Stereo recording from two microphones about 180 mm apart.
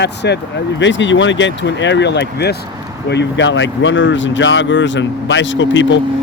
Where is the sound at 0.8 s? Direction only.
90° left.